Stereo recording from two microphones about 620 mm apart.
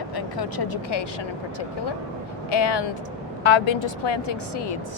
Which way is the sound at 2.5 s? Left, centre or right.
Left.